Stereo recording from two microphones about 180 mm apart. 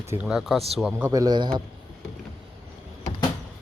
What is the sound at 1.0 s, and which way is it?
Speech, 20° right (ahead or behind).